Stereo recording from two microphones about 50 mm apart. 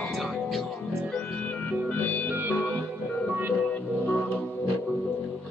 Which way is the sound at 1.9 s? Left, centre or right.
Left.